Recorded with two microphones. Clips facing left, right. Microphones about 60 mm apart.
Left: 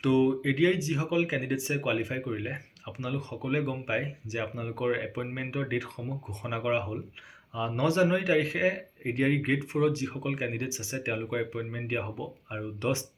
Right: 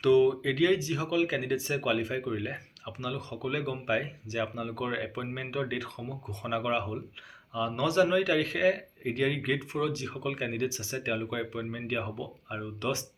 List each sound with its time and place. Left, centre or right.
0.0 s speech: left